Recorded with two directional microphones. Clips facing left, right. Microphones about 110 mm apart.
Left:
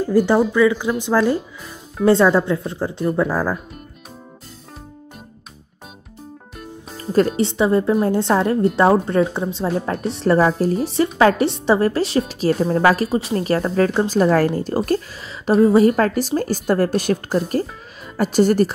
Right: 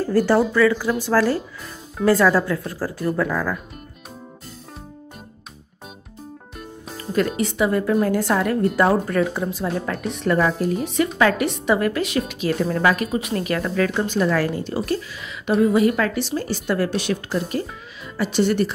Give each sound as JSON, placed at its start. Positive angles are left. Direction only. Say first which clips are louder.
{"t": 0.0, "sound": "a woman's voice", "louder": "left 2 dB", "side_deg": 15}
{"t": 7.0, "sound": "a woman's voice", "louder": "left 4 dB", "side_deg": 35}